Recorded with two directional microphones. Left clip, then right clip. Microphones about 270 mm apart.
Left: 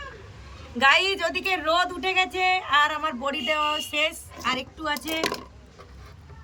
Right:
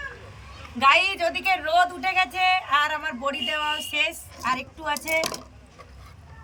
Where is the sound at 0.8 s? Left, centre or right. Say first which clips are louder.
Right 1 dB; centre.